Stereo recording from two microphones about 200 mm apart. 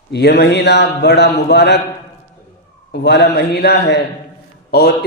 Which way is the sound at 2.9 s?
55° left (ahead or behind).